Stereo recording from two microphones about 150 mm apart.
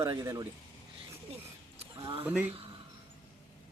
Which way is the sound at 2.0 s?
40° right (ahead or behind).